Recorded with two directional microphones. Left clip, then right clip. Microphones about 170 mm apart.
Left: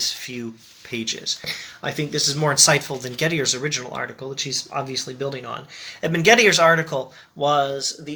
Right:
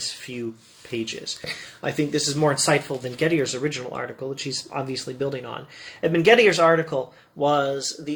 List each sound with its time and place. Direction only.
0.9 s speech: 15° left (ahead or behind)